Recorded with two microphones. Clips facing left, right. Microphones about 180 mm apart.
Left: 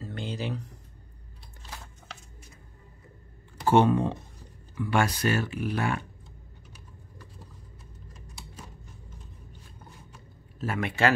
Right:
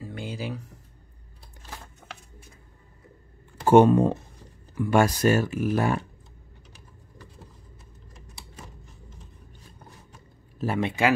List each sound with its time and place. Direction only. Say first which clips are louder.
0.0 s a sound: even; 10° right (ahead or behind)
3.6 s speech: right 5 dB; 45° right (ahead or behind)
10.6 s speech: right 4 dB; 30° right (ahead or behind)